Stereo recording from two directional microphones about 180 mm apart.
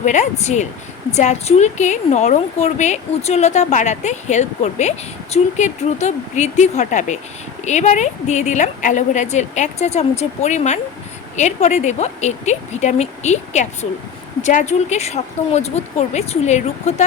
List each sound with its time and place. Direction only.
0.0 s a woman's voice: 40° left (ahead or behind)